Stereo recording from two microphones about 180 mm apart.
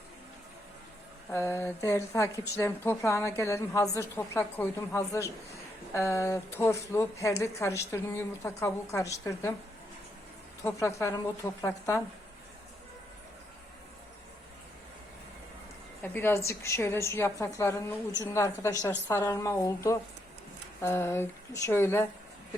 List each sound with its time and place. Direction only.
1.3 s a woman's voice: 15° left (ahead or behind)
10.6 s a woman's voice: 15° left (ahead or behind)
16.1 s a woman's voice: 15° left (ahead or behind)